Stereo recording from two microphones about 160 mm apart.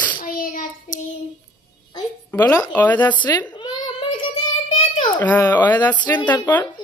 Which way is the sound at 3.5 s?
30° left (ahead or behind).